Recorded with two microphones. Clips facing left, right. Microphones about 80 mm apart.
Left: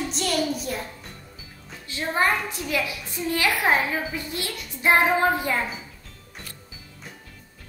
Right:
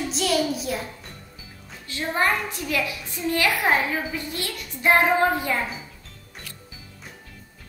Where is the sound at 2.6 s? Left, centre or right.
Centre.